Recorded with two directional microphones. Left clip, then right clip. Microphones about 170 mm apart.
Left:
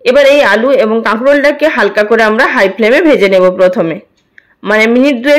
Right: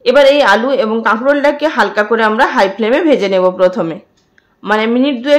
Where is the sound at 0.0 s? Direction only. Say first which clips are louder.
Left 2 dB; 15° left (ahead or behind).